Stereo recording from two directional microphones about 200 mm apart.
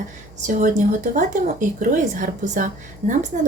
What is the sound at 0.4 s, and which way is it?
Speech, 40° right (ahead or behind).